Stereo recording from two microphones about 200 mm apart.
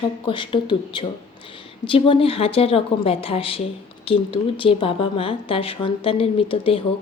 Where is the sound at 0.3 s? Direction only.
25° left (ahead or behind).